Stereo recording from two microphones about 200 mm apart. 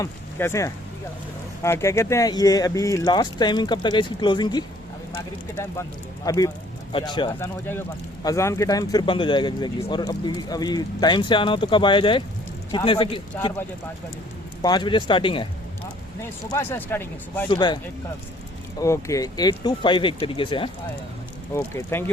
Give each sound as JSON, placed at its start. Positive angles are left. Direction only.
{"t": 0.0, "sound": "speech", "side_deg": 15}
{"t": 6.2, "sound": "speech", "side_deg": 15}
{"t": 14.6, "sound": "speech", "side_deg": 20}
{"t": 16.5, "sound": "speech", "side_deg": 10}
{"t": 17.5, "sound": "speech", "side_deg": 20}
{"t": 18.8, "sound": "speech", "side_deg": 15}
{"t": 21.5, "sound": "speech", "side_deg": 15}